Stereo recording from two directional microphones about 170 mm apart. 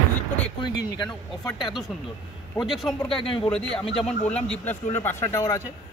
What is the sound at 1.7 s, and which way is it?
A man's voice, centre (ahead or behind).